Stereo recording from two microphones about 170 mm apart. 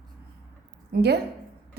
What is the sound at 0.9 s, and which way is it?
Speech, 75° right (ahead or behind).